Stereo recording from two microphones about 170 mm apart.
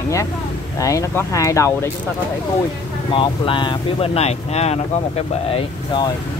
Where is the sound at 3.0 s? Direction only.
30° left (ahead or behind).